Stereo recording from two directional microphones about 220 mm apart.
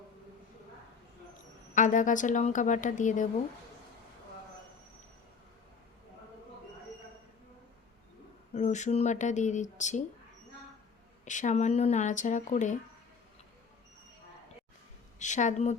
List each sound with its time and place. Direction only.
1.7 s speech: 35° left (ahead or behind)
8.5 s speech: 30° left (ahead or behind)
11.3 s speech: 35° left (ahead or behind)
15.2 s speech: 35° left (ahead or behind)